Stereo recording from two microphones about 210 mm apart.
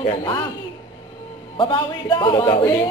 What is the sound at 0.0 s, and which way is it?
Speech, 20° left (ahead or behind).